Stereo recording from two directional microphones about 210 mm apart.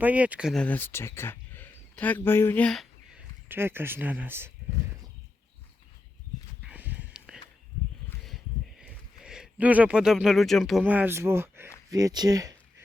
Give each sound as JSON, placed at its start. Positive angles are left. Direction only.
{"t": 0.0, "sound": "speech", "side_deg": -5}
{"t": 6.7, "sound": "a sound", "side_deg": -10}
{"t": 8.8, "sound": "speech", "side_deg": -5}